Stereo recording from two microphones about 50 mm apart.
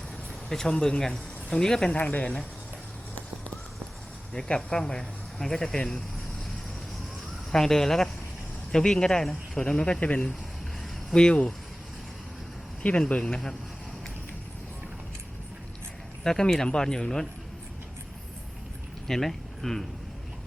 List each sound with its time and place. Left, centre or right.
0.4 s speech: centre
2.0 s speech: left
4.4 s speech: centre
7.5 s speech: centre
12.8 s speech: left
16.2 s speech: centre
19.0 s speech: centre